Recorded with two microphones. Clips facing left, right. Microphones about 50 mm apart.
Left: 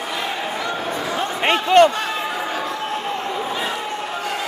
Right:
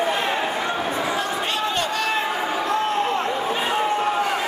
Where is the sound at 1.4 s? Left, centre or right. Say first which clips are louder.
Left 10 dB; left.